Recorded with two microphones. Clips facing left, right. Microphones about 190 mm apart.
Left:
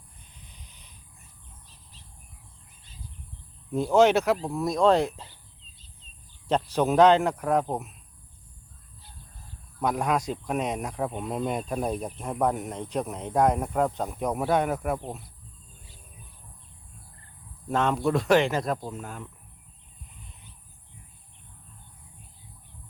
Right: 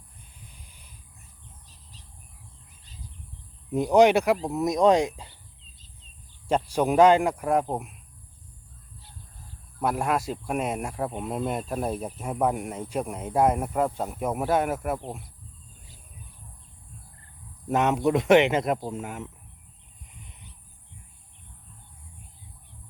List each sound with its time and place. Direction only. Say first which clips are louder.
0.3 s a sound: even; 10° right (ahead or behind)
3.7 s speech: right 2 dB; 15° right (ahead or behind)
6.5 s speech: even; 10° right (ahead or behind)
9.8 s speech: even; 5° right (ahead or behind)
17.7 s speech: right 2 dB; 20° right (ahead or behind)